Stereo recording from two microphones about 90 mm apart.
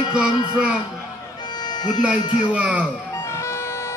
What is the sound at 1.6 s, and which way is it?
Music, 50° left (ahead or behind).